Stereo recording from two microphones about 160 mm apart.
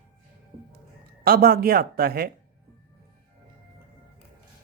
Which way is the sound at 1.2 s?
70° right (ahead or behind).